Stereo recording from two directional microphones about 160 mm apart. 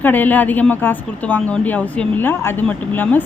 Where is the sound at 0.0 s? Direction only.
10° left (ahead or behind).